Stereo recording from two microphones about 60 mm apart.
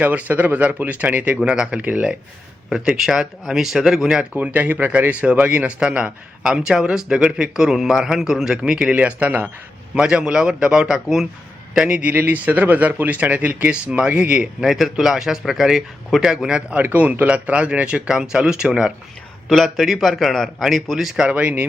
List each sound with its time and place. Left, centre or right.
0.0 s a man's voice: right
2.6 s a man's voice: centre
4.4 s a man's voice: right
9.9 s a man's voice: centre
14.7 s a man's voice: centre
19.5 s a man's voice: centre
21.2 s a man's voice: right